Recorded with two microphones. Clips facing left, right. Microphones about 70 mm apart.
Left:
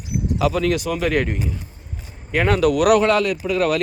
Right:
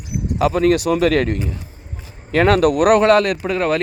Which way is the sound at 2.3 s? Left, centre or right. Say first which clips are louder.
Right 5 dB; right.